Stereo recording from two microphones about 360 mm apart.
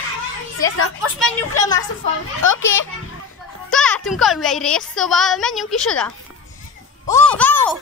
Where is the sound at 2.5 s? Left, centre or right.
Left.